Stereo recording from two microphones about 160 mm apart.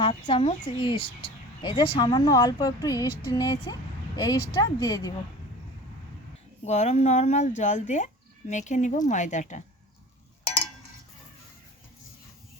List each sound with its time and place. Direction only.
0.0 s speech: 35° left (ahead or behind)
6.7 s speech: 45° left (ahead or behind)